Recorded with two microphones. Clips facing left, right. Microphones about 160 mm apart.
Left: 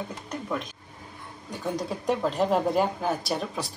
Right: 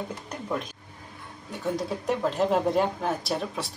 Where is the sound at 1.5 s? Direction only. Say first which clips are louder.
Right 1 dB; centre (ahead or behind).